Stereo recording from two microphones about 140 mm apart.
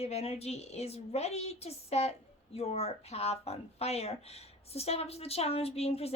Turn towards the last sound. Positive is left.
turn(degrees=45)  # may be behind; listen again after turning